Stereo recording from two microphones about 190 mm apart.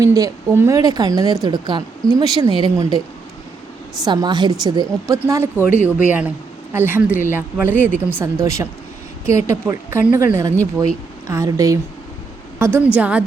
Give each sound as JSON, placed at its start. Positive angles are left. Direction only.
{"t": 0.0, "sound": "a woman's voice", "side_deg": -20}
{"t": 4.0, "sound": "a woman's voice", "side_deg": -20}
{"t": 5.6, "sound": "speech", "side_deg": 40}
{"t": 6.1, "sound": "a woman's voice", "side_deg": -10}